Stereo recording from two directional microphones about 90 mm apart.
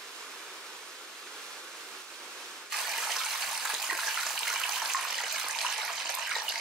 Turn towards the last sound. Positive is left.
turn(degrees=-5)  # may be behind; listen again after turning